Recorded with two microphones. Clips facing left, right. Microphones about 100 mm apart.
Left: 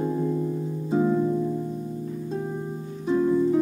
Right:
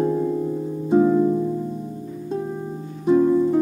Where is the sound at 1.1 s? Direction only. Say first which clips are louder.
Right 5 dB; 20° right (ahead or behind).